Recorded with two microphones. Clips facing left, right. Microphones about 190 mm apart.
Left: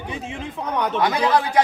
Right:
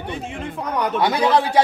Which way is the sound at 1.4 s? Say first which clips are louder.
Right 1 dB; 30° right (ahead or behind).